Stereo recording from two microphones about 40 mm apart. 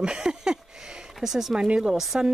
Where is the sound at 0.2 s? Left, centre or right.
Centre.